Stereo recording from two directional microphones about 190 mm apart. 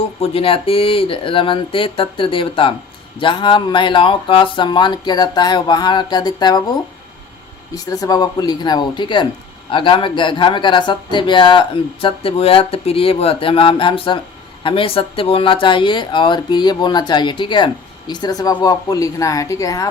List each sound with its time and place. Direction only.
0.2 s speech: 30° left (ahead or behind)
7.9 s speech: 20° left (ahead or behind)